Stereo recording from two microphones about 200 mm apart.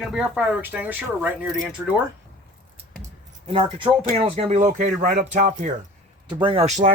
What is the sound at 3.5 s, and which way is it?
Speech, 25° right (ahead or behind).